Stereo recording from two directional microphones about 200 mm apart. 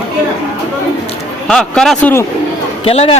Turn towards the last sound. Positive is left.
turn(degrees=30)  # may be behind; listen again after turning